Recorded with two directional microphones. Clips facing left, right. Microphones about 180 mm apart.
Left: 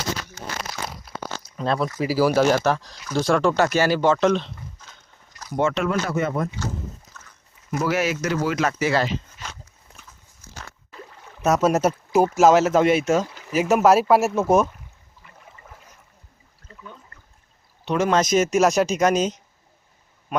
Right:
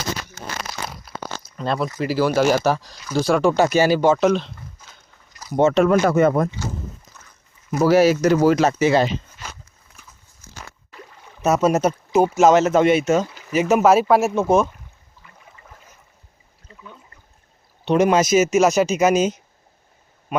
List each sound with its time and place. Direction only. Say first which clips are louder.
1.5 s speech: even; centre (ahead or behind)
5.7 s speech: right 8 dB; 45° right (ahead or behind)
7.1 s dog: left 1 dB; 10° right (ahead or behind)
7.7 s speech: right 8 dB; 35° right (ahead or behind)
11.3 s speech: right 1 dB; centre (ahead or behind)
15.6 s boat: even; 5° left (ahead or behind)
17.9 s speech: right 4 dB; 10° right (ahead or behind)